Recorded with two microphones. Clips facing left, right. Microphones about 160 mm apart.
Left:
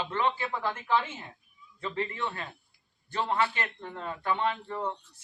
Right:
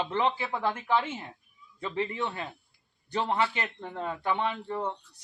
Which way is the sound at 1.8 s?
20° right (ahead or behind).